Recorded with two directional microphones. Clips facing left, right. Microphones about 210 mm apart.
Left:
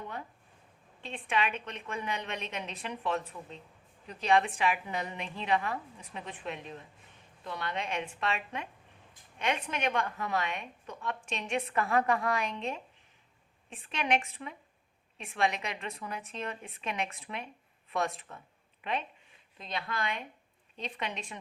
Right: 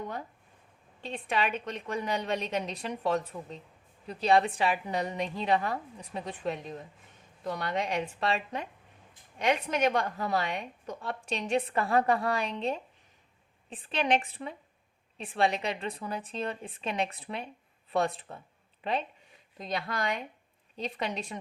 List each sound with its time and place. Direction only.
1.0 s a woman's voice: 40° right (ahead or behind)